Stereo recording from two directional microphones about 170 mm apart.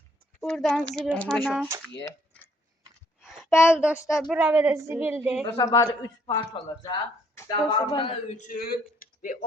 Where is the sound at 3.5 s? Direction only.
15° left (ahead or behind).